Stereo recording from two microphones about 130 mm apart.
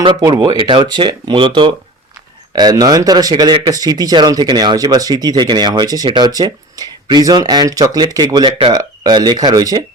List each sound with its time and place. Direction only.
0.0 s speech: 35° right (ahead or behind)